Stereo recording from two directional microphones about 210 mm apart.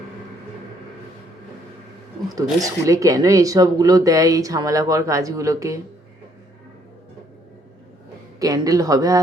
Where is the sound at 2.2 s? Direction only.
15° right (ahead or behind).